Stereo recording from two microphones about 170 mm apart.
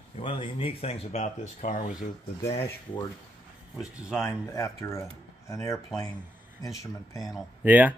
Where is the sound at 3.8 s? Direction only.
5° right (ahead or behind).